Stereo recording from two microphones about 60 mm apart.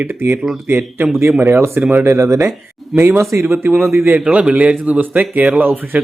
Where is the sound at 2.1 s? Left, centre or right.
Right.